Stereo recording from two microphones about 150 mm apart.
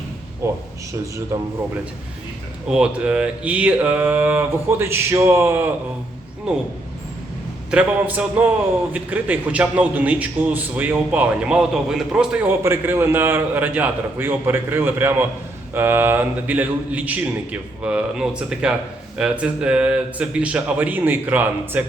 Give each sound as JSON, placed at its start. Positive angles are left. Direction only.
{"t": 0.4, "sound": "a man's voice", "side_deg": -15}
{"t": 2.6, "sound": "a man's voice", "side_deg": -5}
{"t": 7.7, "sound": "a man's voice", "side_deg": -10}